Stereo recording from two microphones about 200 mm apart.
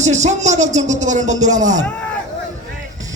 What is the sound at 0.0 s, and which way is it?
Speech, 35° right (ahead or behind).